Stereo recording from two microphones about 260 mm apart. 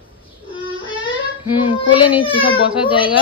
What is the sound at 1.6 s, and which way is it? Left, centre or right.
A child's voice, centre.